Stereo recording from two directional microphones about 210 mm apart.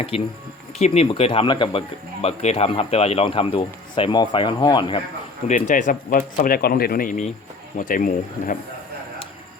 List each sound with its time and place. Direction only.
0.1 s speech: 30° left (ahead or behind)
5.5 s speech: 35° left (ahead or behind)